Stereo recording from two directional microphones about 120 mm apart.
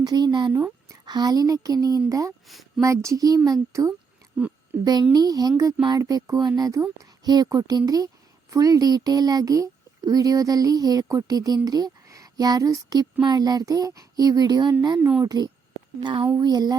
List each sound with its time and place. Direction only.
0.0 s child singing: 35° right (ahead or behind)
2.0 s a child's voice: 30° right (ahead or behind)
2.5 s speech: centre (ahead or behind)
2.8 s a child's voice: 25° right (ahead or behind)
4.4 s a woman's voice: 10° right (ahead or behind)
4.8 s child singing: 35° right (ahead or behind)
6.6 s a child's voice: 30° right (ahead or behind)
13.2 s child singing: 35° right (ahead or behind)